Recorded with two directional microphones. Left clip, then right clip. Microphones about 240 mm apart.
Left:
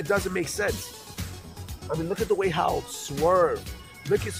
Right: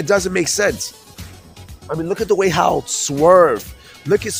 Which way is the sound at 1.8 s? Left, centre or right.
Right.